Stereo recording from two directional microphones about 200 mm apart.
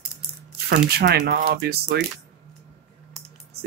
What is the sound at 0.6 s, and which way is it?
Speech, 55° right (ahead or behind).